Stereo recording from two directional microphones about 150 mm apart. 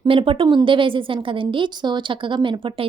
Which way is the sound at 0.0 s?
35° right (ahead or behind).